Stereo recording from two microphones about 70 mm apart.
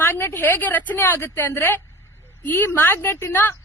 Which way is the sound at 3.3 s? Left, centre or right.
Left.